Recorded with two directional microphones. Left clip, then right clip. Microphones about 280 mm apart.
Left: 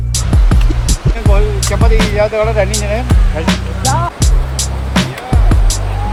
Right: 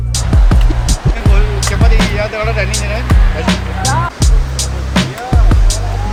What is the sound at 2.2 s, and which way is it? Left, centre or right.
Speech, centre.